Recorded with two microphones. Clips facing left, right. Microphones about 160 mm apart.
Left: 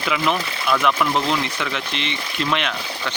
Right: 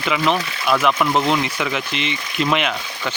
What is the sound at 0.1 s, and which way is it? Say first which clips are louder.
Speech: right 2 dB; 5° right (ahead or behind).